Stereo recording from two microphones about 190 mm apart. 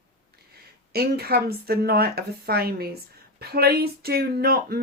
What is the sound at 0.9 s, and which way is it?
A woman's voice, 55° right (ahead or behind).